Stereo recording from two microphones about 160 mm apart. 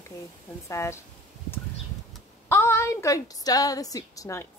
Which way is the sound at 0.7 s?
15° left (ahead or behind).